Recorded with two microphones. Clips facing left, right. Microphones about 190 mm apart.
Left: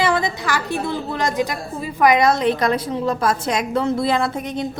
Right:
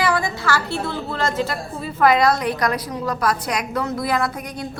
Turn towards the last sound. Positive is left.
turn(degrees=25)  # may be behind; listen again after turning